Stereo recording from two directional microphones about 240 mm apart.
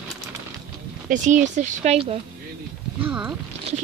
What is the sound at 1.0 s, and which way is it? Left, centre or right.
Speech, right.